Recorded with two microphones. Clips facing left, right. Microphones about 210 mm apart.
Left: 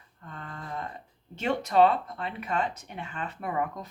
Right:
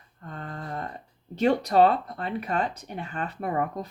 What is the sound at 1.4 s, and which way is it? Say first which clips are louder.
Speech: right 3 dB; 35° right (ahead or behind).